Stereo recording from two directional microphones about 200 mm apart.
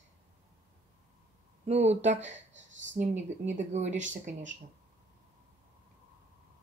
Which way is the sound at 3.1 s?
35° right (ahead or behind).